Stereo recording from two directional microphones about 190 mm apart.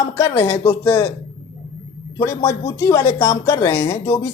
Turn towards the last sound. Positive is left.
turn(degrees=15)  # may be behind; listen again after turning